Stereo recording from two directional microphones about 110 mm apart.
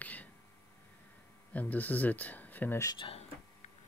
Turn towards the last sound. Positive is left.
turn(degrees=70)  # may be behind; listen again after turning